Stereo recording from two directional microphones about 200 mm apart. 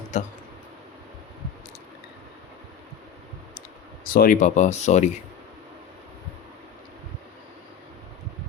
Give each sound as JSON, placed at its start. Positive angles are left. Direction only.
{"t": 0.1, "sound": "speech", "side_deg": 35}
{"t": 4.0, "sound": "speech", "side_deg": 45}